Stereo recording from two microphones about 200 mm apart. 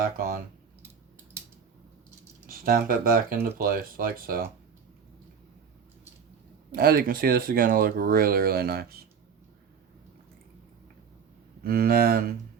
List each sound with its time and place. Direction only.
0.0 s speech: 45° right (ahead or behind)
2.5 s speech: 45° right (ahead or behind)
6.7 s speech: 45° right (ahead or behind)
11.6 s speech: 50° right (ahead or behind)